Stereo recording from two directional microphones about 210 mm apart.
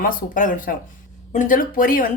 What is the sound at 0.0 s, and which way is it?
Speech, 40° left (ahead or behind).